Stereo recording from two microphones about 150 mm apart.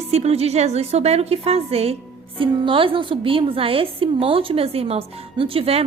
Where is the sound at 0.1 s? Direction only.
45° right (ahead or behind).